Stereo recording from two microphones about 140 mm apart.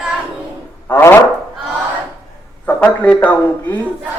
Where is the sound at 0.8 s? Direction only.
20° left (ahead or behind).